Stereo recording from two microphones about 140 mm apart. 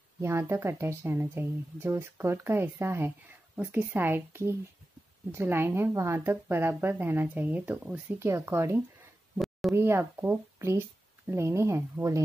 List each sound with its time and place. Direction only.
0.2 s speech: 20° right (ahead or behind)
9.4 s a sound: centre (ahead or behind)
9.8 s speech: 15° right (ahead or behind)